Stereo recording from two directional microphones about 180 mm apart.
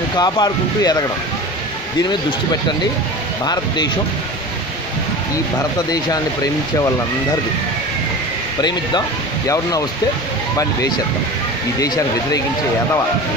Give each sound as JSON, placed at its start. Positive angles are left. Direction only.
{"t": 0.1, "sound": "speech", "side_deg": 20}
{"t": 8.5, "sound": "speech", "side_deg": 25}
{"t": 11.8, "sound": "speech", "side_deg": 20}